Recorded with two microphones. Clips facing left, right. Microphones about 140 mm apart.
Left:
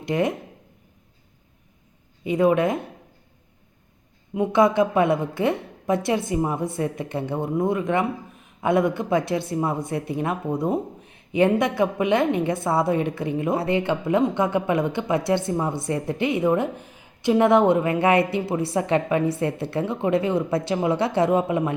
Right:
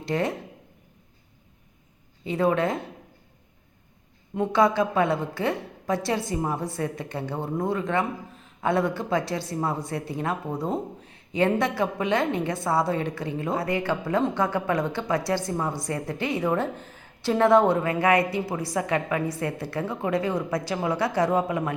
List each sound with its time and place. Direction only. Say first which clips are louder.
0.1 s a woman's voice: left 3 dB; 20° left (ahead or behind)
2.2 s speech: left 4 dB; 15° left (ahead or behind)
4.5 s a woman's voice: left 3 dB; 20° left (ahead or behind)